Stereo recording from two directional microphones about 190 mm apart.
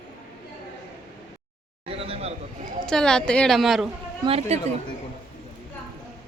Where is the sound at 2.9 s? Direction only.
5° left (ahead or behind).